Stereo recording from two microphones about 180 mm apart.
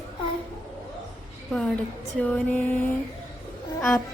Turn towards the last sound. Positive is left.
turn(degrees=5)  # may be behind; listen again after turning